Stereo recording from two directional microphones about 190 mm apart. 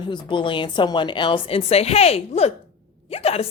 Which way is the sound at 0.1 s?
25° left (ahead or behind).